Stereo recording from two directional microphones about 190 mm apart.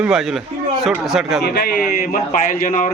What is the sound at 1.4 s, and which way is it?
Speech, 55° left (ahead or behind).